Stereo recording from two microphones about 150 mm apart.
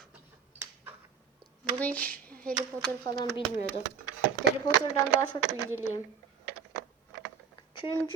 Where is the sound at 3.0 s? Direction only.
30° left (ahead or behind).